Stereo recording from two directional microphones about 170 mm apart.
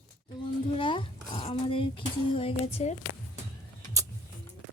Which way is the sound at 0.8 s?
30° left (ahead or behind).